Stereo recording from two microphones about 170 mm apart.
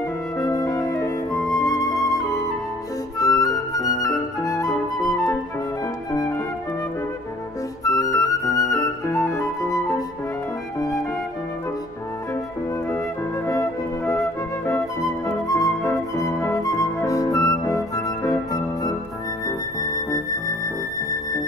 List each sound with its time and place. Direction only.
0.4 s music: 20° left (ahead or behind)
1.6 s flute: 20° left (ahead or behind)
7.8 s flute: 20° left (ahead or behind)
13.5 s flute: 20° left (ahead or behind)
19.4 s music: 20° left (ahead or behind)